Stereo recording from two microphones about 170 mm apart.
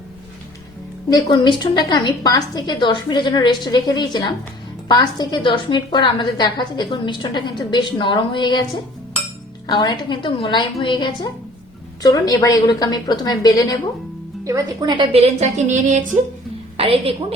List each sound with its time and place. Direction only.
1.1 s a woman's voice: 25° left (ahead or behind)
9.6 s a woman's voice: 25° left (ahead or behind)
14.4 s a woman's voice: 20° right (ahead or behind); by 16.0 s 45° right (ahead or behind)
16.7 s a woman's voice: 35° right (ahead or behind)